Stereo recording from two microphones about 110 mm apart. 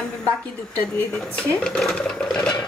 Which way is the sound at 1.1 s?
5° left (ahead or behind).